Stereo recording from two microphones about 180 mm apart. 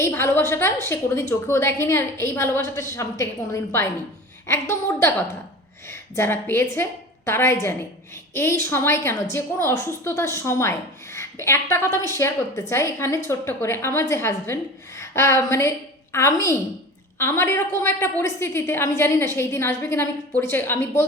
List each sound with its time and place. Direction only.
0.0 s a woman's voice: 15° left (ahead or behind)